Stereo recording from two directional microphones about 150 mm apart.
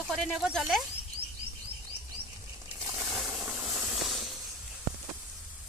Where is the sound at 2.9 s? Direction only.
5° right (ahead or behind).